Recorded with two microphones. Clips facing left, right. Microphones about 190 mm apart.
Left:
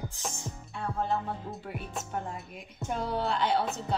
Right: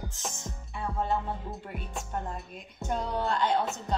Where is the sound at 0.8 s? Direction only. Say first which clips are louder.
Right 1 dB; centre (ahead or behind).